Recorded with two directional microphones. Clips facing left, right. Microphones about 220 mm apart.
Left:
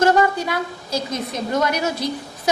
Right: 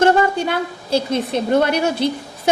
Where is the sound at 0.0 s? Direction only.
30° right (ahead or behind).